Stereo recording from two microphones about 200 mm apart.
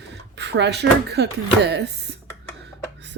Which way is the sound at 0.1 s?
60° right (ahead or behind).